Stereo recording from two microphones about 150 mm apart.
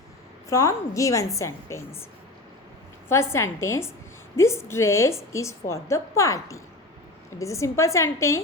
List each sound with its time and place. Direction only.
0.5 s a woman's voice: 20° left (ahead or behind)
3.1 s a woman's voice: 20° left (ahead or behind)